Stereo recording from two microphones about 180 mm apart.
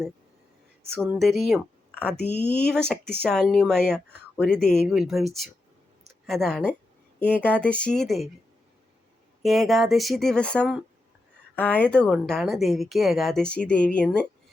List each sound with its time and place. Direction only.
1.2 s speech: centre (ahead or behind)
2.2 s speech: 30° right (ahead or behind)
2.6 s a woman's voice: 5° left (ahead or behind)
9.4 s a woman's voice: centre (ahead or behind)